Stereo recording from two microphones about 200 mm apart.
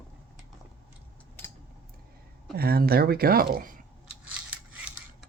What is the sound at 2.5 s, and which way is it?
Speech, 50° right (ahead or behind).